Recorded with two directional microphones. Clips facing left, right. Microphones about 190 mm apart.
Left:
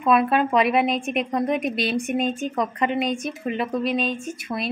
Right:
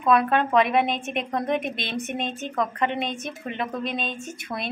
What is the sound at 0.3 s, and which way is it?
A woman's voice, 5° left (ahead or behind).